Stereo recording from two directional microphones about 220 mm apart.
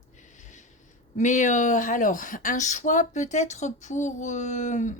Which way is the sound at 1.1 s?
35° left (ahead or behind).